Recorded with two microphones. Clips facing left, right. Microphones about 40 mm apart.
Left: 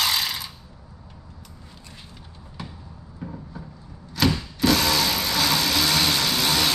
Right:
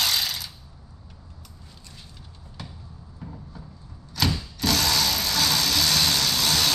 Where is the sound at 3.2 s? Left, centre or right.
Left.